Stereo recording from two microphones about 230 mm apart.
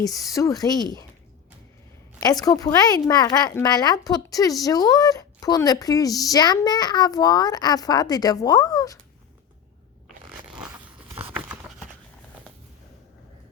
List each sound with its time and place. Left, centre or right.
0.0 s speech: centre
2.3 s speech: centre
11.2 s a sound: centre